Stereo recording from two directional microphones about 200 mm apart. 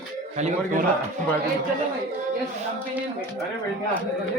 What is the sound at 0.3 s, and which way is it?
Speech, 40° right (ahead or behind).